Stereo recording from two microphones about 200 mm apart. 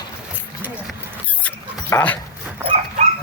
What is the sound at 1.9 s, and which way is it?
Speech, 5° left (ahead or behind).